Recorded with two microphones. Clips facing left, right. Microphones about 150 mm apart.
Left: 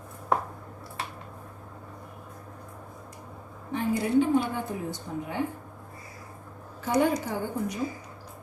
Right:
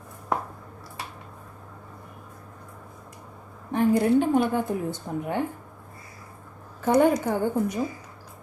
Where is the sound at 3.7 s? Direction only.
50° right (ahead or behind).